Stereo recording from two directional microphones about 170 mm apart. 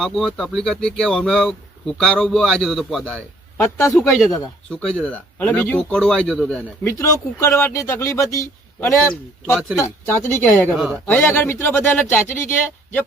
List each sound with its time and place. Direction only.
0.0 s speech: centre (ahead or behind)
3.6 s speech: 15° left (ahead or behind)
6.8 s speech: 15° left (ahead or behind)
10.8 s speech: 5° right (ahead or behind)
11.0 s speech: 10° left (ahead or behind)